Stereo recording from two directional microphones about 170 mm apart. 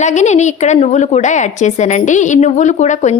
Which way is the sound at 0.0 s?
45° left (ahead or behind).